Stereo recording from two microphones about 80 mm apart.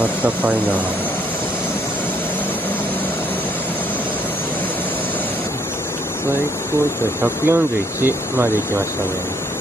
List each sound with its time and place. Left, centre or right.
0.0 s speech: centre
7.2 s speech: right